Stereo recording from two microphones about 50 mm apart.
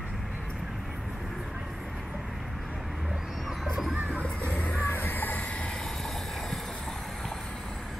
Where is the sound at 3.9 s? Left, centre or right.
Centre.